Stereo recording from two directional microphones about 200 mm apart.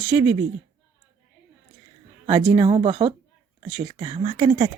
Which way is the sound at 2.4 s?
15° right (ahead or behind).